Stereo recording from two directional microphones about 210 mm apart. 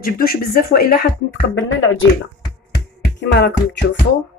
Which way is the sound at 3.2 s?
55° left (ahead or behind).